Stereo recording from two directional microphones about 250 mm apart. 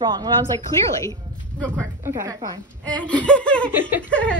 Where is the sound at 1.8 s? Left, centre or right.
Centre.